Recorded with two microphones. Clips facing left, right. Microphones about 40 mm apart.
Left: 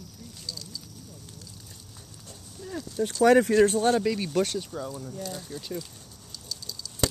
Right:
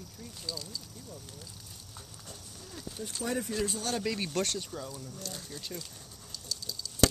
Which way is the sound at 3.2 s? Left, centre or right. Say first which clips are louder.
Left 15 dB; left.